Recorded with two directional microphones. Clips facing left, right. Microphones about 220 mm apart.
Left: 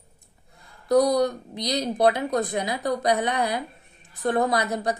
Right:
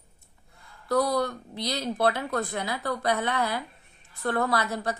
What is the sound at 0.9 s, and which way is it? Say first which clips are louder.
A woman's voice: left 6 dB; 20° left (ahead or behind).